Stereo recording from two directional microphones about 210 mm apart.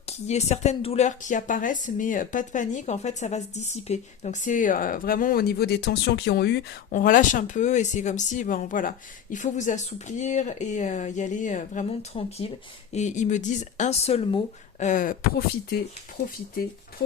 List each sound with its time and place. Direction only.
0.0 s speech: 30° left (ahead or behind); by 6.7 s 50° left (ahead or behind)
6.9 s speech: 40° left (ahead or behind)
14.8 s speech: 40° left (ahead or behind)